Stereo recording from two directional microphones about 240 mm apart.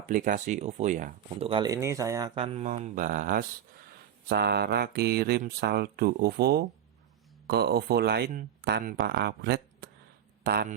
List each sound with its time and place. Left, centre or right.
0.1 s speech: right